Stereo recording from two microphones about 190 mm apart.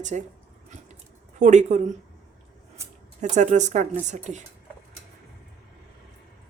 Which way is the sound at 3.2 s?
40° right (ahead or behind).